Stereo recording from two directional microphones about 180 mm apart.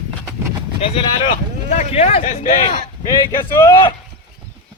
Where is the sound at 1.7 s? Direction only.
40° left (ahead or behind).